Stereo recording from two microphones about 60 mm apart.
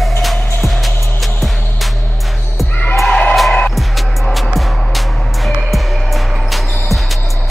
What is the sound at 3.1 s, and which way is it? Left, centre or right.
Music, left.